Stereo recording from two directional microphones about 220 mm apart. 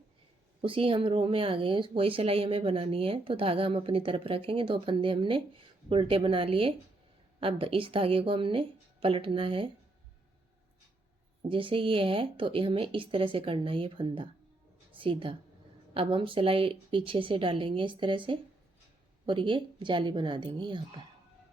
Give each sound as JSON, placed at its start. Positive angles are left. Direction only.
{"t": 0.6, "sound": "speech", "side_deg": -25}
{"t": 11.4, "sound": "a woman's voice", "side_deg": -25}